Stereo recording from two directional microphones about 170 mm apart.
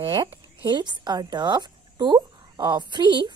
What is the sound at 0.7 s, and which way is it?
A woman's voice, 25° right (ahead or behind).